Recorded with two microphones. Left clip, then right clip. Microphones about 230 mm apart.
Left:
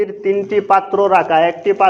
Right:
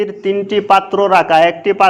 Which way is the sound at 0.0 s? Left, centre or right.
Right.